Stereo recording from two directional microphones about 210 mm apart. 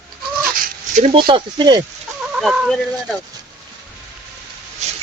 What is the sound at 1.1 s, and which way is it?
Speech, 25° right (ahead or behind).